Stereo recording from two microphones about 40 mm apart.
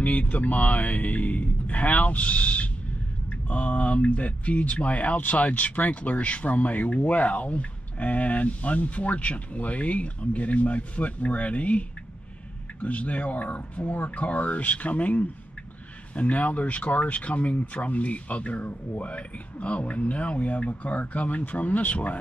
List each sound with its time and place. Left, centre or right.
0.0 s speech: left
12.8 s speech: left